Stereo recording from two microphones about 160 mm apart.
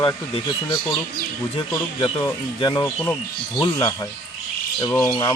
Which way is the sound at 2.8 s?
15° left (ahead or behind).